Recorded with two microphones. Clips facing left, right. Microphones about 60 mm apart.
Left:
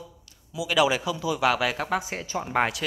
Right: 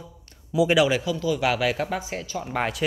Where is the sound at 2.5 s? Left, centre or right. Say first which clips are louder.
Left 2 dB; centre.